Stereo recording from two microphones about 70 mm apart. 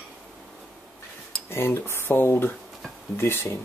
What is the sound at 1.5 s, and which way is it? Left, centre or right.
Speech, left.